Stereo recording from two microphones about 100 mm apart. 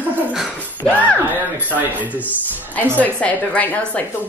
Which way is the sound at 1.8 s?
15° right (ahead or behind).